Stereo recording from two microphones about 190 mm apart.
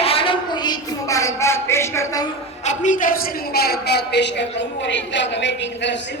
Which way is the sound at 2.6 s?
40° left (ahead or behind).